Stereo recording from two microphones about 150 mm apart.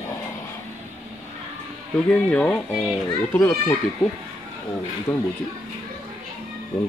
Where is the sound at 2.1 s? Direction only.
10° left (ahead or behind).